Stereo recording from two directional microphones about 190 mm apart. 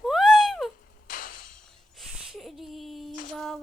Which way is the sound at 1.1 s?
45° left (ahead or behind).